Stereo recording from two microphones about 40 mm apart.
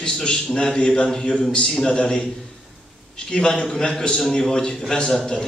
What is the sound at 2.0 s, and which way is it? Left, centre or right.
Speech, left.